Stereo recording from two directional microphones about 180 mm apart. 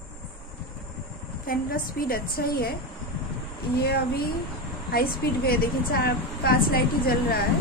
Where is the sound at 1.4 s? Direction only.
55° left (ahead or behind).